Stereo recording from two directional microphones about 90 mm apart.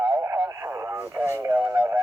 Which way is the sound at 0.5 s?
30° right (ahead or behind).